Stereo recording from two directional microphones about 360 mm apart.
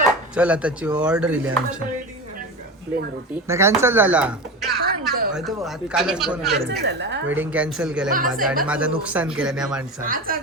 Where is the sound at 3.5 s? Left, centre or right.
Centre.